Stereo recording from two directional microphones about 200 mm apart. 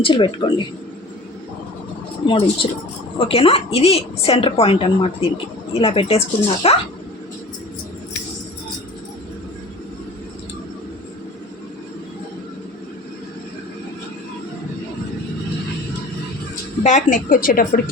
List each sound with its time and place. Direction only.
0.0 s a woman's voice: 25° left (ahead or behind)
2.2 s a woman's voice: 25° left (ahead or behind)
16.8 s a woman's voice: 40° left (ahead or behind)